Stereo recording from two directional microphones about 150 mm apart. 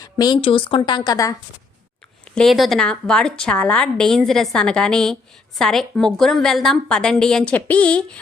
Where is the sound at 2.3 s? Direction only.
Centre (ahead or behind).